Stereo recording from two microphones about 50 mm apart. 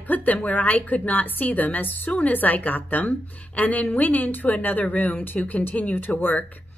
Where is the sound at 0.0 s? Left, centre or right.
Left.